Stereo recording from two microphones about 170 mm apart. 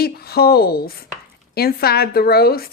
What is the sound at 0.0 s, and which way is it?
Speech, 65° left (ahead or behind).